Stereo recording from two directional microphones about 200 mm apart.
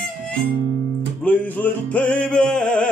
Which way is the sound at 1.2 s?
10° left (ahead or behind).